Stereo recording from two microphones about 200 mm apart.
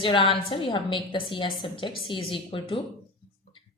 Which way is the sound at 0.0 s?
25° left (ahead or behind).